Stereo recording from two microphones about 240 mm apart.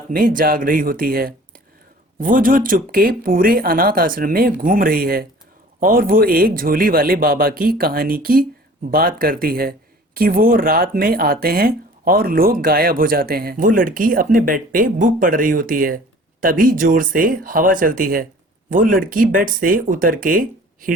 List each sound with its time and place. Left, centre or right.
0.1 s speech: right